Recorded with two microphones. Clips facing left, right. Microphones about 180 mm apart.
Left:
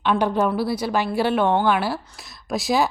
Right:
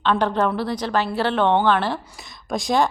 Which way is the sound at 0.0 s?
10° left (ahead or behind).